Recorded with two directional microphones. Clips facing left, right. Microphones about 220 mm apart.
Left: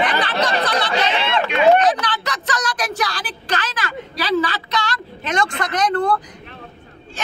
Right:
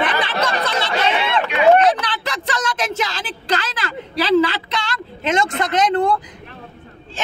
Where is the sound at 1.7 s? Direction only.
25° right (ahead or behind).